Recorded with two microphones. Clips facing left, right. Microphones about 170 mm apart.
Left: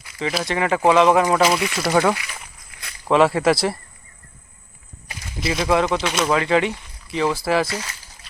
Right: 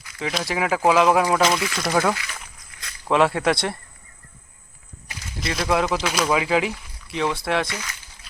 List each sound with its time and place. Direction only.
0.2 s speech: centre (ahead or behind)
5.4 s speech: centre (ahead or behind)
7.7 s speech: 30° left (ahead or behind)